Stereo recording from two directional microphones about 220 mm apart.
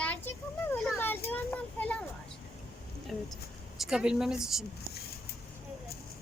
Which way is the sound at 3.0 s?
Centre (ahead or behind).